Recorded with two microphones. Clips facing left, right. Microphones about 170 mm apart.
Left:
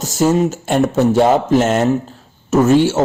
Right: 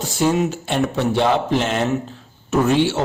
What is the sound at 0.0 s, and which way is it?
A man's voice, 40° left (ahead or behind).